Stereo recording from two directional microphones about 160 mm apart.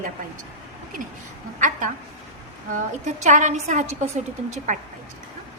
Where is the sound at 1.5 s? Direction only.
55° right (ahead or behind).